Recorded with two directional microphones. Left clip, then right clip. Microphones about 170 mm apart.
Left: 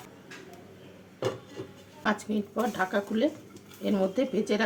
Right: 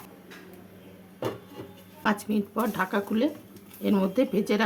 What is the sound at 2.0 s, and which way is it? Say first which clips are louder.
Speech: right 2 dB; 30° right (ahead or behind).